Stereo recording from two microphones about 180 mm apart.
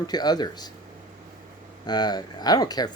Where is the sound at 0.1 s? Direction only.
20° left (ahead or behind).